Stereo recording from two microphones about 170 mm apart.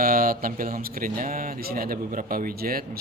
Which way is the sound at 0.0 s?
60° right (ahead or behind).